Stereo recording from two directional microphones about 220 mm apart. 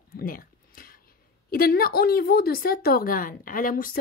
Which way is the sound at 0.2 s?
40° left (ahead or behind).